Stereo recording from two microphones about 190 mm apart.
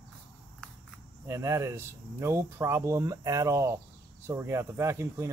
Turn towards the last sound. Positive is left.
turn(degrees=-15)  # may be behind; listen again after turning